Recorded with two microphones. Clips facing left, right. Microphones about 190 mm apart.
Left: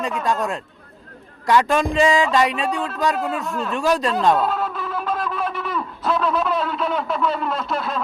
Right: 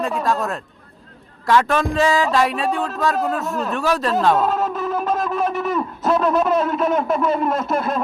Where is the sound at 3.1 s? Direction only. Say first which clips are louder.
Right 3 dB; 40° right (ahead or behind).